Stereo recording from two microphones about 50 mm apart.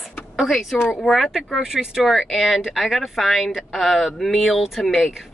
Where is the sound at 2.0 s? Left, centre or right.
Centre.